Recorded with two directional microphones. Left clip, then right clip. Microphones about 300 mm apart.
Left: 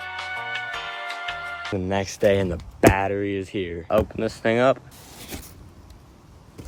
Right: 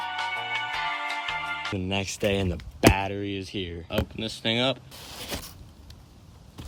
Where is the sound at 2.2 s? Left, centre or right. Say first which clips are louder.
Left 9 dB; centre.